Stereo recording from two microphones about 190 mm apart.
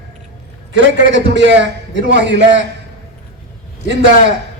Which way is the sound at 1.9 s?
65° right (ahead or behind).